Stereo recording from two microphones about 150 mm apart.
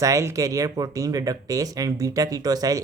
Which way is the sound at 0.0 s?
20° right (ahead or behind).